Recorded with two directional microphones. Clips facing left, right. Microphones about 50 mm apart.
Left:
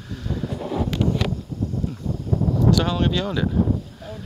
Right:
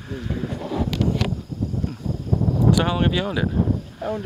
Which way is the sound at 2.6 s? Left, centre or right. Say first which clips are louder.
Right 1 dB; centre.